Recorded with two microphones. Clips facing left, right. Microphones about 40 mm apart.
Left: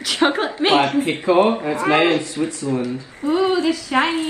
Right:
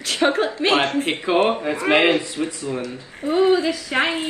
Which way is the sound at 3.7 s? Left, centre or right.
Right.